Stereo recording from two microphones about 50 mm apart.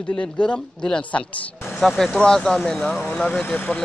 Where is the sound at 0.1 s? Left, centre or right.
Centre.